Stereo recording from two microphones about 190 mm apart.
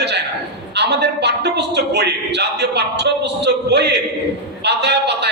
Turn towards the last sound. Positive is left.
turn(degrees=-60)  # may be behind; listen again after turning